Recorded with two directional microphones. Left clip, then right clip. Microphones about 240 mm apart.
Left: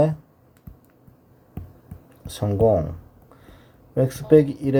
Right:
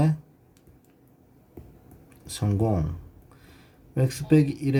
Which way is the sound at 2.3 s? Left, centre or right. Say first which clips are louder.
Left 9 dB; centre.